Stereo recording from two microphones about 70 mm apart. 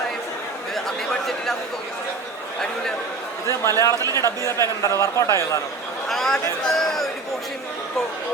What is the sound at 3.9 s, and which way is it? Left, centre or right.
Speech, right.